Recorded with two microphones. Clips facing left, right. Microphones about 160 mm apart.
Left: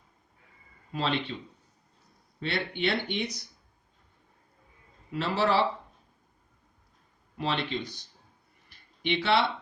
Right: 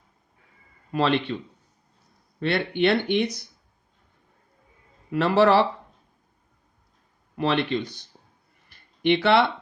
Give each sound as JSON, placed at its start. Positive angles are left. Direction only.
{"t": 0.9, "sound": "speech", "side_deg": -70}
{"t": 2.4, "sound": "speech", "side_deg": -65}
{"t": 5.1, "sound": "speech", "side_deg": -65}
{"t": 7.3, "sound": "speech", "side_deg": -65}
{"t": 9.0, "sound": "speech", "side_deg": -60}